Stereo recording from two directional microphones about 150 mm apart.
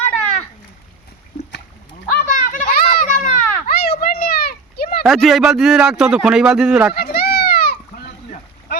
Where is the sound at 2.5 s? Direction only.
70° left (ahead or behind); by 4.9 s 90° left.